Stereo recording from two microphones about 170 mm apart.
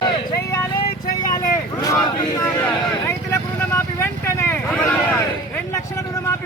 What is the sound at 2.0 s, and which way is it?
Speech, 25° left (ahead or behind).